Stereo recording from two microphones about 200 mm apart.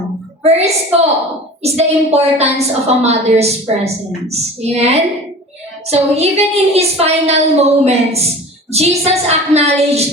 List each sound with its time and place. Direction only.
0.4 s a woman's voice: 30° right (ahead or behind)